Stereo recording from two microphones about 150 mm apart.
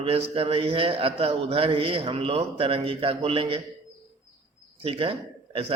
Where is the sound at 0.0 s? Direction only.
40° right (ahead or behind).